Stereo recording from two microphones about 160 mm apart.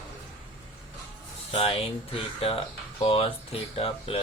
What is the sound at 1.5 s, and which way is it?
Speech, 35° left (ahead or behind).